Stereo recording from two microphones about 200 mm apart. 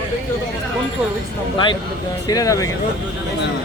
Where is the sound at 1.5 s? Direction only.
25° left (ahead or behind).